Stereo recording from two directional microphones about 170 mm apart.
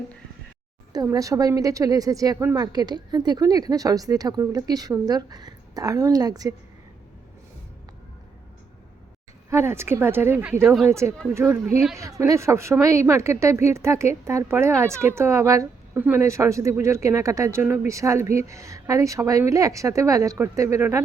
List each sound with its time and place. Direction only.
1.1 s speech: 20° right (ahead or behind)
9.5 s a woman's voice: 15° right (ahead or behind)